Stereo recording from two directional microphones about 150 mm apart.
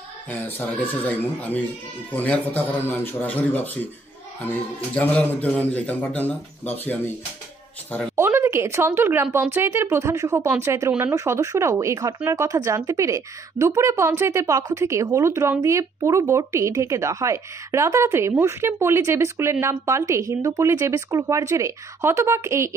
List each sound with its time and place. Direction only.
0.3 s a man's voice: 10° left (ahead or behind)
8.2 s speech: 15° right (ahead or behind)